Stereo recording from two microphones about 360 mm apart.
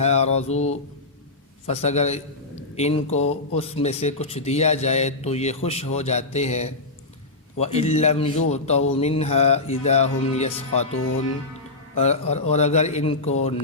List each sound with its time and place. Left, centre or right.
0.0 s mantra: centre
1.6 s speech: centre
11.9 s speech: centre